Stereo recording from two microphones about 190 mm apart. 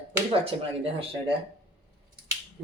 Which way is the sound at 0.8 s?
30° right (ahead or behind).